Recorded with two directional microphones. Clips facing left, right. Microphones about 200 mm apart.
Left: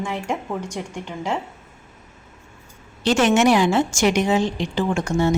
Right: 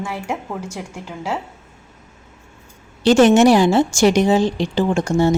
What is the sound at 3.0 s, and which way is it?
A woman's voice, 35° right (ahead or behind).